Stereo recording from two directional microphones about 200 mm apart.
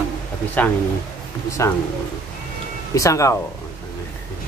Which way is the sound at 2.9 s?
15° left (ahead or behind).